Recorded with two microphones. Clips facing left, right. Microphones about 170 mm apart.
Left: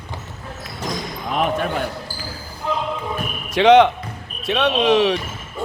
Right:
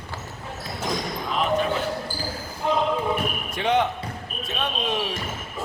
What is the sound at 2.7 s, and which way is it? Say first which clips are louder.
Basketball bounce: right 1 dB; 20° right (ahead or behind).